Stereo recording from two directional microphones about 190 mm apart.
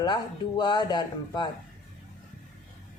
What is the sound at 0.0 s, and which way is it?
A man's voice, 25° left (ahead or behind).